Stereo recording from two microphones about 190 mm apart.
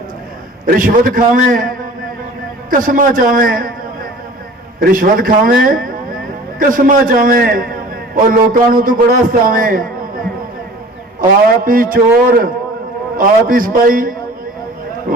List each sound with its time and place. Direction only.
0.6 s a man's voice: 45° right (ahead or behind)
4.9 s a man's voice: 45° right (ahead or behind)
11.2 s a man's voice: 45° right (ahead or behind)